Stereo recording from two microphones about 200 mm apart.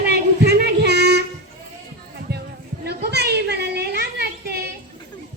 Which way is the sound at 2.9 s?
55° right (ahead or behind).